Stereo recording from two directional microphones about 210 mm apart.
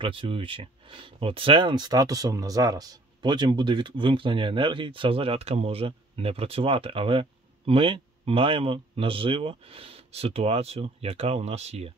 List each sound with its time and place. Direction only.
0.0 s speech: 25° right (ahead or behind)